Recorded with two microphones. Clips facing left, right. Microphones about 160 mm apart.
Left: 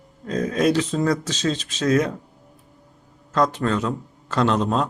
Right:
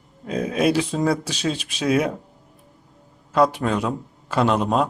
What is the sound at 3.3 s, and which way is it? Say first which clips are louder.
A man's voice: right 2 dB; 10° right (ahead or behind).